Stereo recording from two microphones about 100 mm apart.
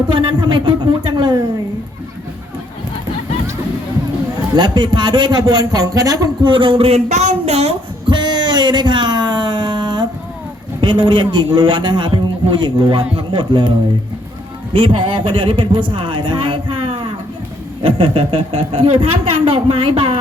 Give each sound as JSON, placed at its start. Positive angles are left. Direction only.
{"t": 0.1, "sound": "a man's voice", "side_deg": -55}
{"t": 4.5, "sound": "a man's voice", "side_deg": -45}
{"t": 6.5, "sound": "speech", "side_deg": -60}
{"t": 7.4, "sound": "a child's voice", "side_deg": -90}
{"t": 8.1, "sound": "a sound", "side_deg": -45}
{"t": 10.8, "sound": "a man's voice", "side_deg": -50}